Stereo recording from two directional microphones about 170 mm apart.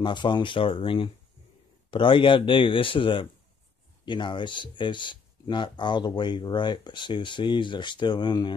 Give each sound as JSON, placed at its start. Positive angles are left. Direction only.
{"t": 0.0, "sound": "speech", "side_deg": 25}